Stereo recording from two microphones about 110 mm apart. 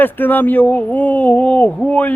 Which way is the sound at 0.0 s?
15° left (ahead or behind).